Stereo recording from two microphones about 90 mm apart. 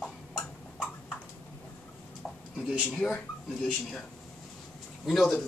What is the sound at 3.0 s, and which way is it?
Speech, 20° left (ahead or behind).